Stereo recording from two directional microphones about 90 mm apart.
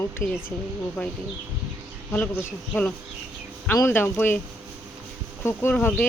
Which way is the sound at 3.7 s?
25° left (ahead or behind).